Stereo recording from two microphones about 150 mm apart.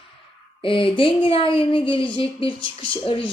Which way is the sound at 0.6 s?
35° left (ahead or behind).